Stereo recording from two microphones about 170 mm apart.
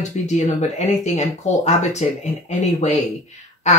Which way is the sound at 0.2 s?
45° left (ahead or behind).